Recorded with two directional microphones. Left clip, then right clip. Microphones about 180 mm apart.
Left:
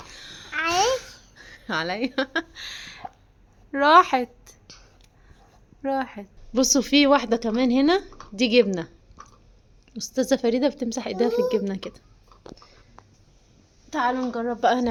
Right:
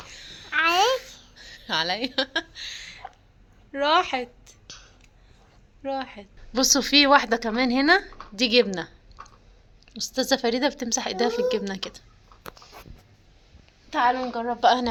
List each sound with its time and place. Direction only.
0.0 s babbling: 55° left (ahead or behind)
0.5 s babbling: centre (ahead or behind)
1.4 s speech: 45° left (ahead or behind)
4.6 s whispering: centre (ahead or behind)
5.8 s a woman's voice: 50° left (ahead or behind)
13.9 s a woman's voice: 55° left (ahead or behind)